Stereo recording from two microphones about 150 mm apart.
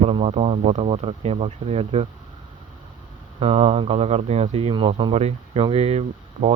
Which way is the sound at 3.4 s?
40° right (ahead or behind).